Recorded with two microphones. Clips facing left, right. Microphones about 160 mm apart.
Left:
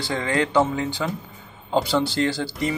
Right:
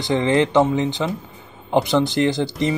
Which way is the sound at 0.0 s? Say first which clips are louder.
Right 6 dB; 20° right (ahead or behind).